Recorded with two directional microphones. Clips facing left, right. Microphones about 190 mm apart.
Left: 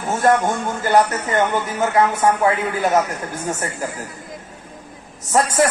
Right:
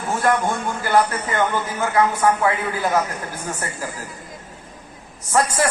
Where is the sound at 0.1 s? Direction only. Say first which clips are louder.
Left 3 dB; 20° left (ahead or behind).